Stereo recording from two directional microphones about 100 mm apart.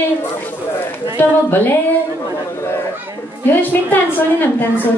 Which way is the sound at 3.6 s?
20° left (ahead or behind).